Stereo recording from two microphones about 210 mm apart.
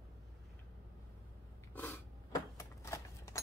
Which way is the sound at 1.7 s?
10° left (ahead or behind).